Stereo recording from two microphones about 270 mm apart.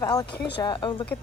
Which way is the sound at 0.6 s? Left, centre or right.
Centre.